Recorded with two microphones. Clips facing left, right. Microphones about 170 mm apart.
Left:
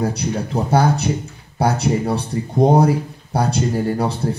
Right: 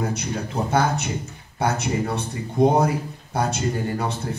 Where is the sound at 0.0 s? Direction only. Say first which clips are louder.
Left 5 dB; 35° left (ahead or behind).